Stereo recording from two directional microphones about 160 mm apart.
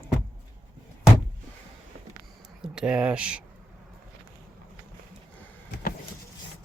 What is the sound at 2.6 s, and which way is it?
Speech, 5° right (ahead or behind).